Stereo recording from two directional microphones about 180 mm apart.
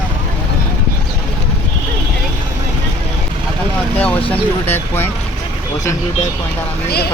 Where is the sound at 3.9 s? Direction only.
10° left (ahead or behind).